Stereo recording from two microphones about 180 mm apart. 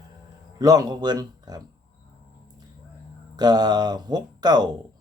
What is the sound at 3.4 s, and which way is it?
Speech, 25° right (ahead or behind).